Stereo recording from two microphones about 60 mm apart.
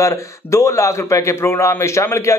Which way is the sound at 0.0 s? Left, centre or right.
Left.